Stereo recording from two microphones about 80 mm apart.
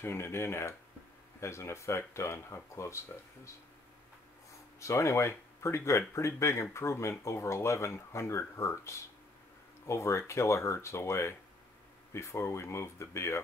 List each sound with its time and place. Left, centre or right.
0.0 s speech: left
4.7 s speech: left